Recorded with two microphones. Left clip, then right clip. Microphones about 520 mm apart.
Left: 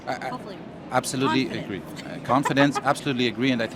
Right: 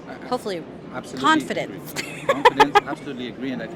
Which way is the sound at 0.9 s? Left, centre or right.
Left.